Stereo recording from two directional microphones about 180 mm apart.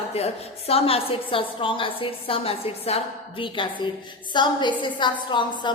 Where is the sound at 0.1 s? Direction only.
35° left (ahead or behind).